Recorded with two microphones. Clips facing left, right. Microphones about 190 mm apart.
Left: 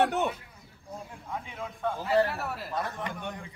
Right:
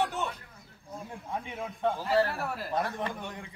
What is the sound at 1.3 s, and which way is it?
Speech, 20° right (ahead or behind).